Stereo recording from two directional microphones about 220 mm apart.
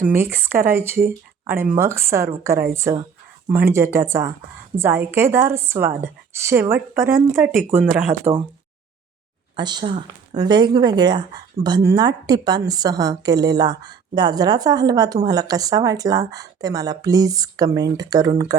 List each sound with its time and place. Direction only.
0.2 s speech: 10° right (ahead or behind)
8.2 s speech: 25° right (ahead or behind)
9.6 s speech: 20° right (ahead or behind)